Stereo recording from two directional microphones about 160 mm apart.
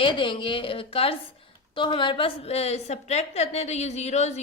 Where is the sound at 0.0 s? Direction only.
30° left (ahead or behind).